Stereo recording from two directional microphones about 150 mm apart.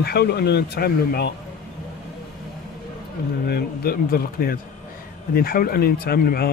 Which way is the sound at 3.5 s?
85° left.